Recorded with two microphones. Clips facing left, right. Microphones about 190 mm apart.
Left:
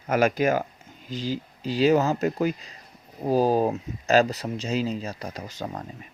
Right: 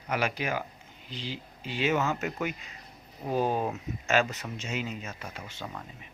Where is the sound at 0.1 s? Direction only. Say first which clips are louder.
Left 9 dB; 45° left (ahead or behind).